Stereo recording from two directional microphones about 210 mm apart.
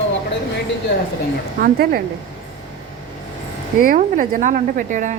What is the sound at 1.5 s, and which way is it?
Speech, 45° right (ahead or behind).